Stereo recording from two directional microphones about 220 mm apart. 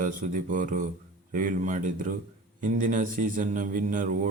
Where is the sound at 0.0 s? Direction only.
35° right (ahead or behind).